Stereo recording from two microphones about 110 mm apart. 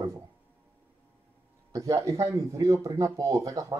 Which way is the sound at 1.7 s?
30° right (ahead or behind).